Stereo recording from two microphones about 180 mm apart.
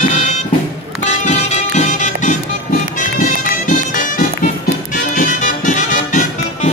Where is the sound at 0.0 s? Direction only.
40° left (ahead or behind).